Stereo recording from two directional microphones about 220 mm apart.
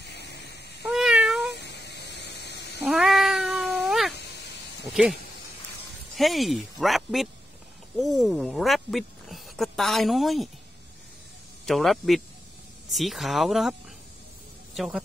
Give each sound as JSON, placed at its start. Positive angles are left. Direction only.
{"t": 0.0, "sound": "a sound", "side_deg": 50}
{"t": 0.9, "sound": "cat", "side_deg": 0}
{"t": 1.5, "sound": "a sound", "side_deg": 50}
{"t": 2.8, "sound": "cat", "side_deg": 0}
{"t": 6.1, "sound": "speech", "side_deg": 0}
{"t": 11.6, "sound": "speech", "side_deg": 0}